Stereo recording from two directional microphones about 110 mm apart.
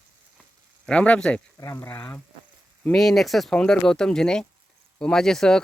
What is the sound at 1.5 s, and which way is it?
Speech, 25° left (ahead or behind).